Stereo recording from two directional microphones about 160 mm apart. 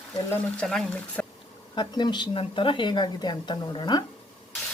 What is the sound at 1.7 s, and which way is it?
A woman's voice, 25° left (ahead or behind).